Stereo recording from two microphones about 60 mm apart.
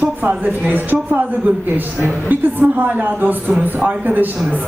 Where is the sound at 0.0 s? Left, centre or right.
Right.